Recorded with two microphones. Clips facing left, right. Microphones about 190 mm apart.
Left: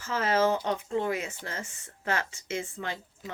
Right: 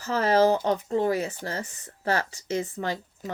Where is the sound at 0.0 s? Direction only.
40° right (ahead or behind).